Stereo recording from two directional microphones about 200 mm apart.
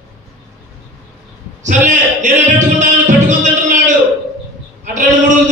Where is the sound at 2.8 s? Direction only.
40° right (ahead or behind).